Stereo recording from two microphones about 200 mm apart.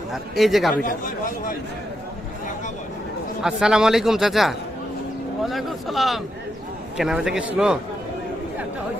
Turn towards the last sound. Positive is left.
turn(degrees=-5)  # may be behind; listen again after turning